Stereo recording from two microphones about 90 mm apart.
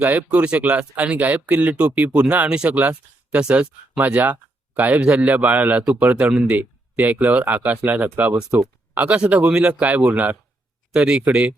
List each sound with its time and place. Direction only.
0.0 s speech: 15° right (ahead or behind)
9.0 s speech: 15° right (ahead or behind)